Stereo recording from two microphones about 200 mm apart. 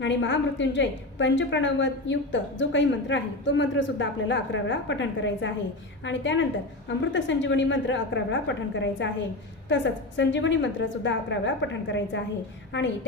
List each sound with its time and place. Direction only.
0.0 s a woman's voice: 65° left (ahead or behind)